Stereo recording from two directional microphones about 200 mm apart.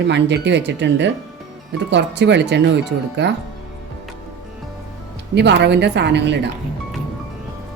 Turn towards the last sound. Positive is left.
turn(degrees=-60)  # may be behind; listen again after turning